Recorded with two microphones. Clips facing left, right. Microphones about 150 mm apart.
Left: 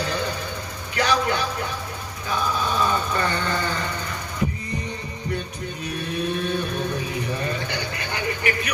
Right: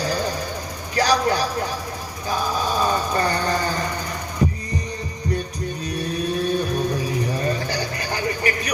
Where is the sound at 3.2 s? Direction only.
35° right (ahead or behind).